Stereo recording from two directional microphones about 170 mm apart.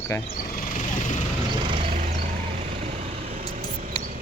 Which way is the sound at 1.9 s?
50° right (ahead or behind).